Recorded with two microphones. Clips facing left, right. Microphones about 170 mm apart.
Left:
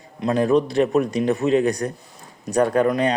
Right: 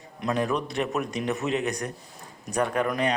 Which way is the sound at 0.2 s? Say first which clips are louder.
Left 8 dB; 30° left (ahead or behind).